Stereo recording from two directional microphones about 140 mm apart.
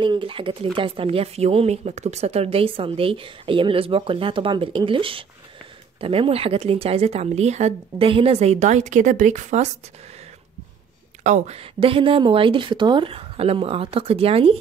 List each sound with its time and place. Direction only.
0.0 s speech: 35° right (ahead or behind); by 9.7 s 60° right (ahead or behind)
11.2 s speech: 50° right (ahead or behind)